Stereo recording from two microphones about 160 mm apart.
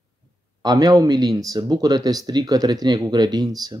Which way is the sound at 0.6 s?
25° right (ahead or behind).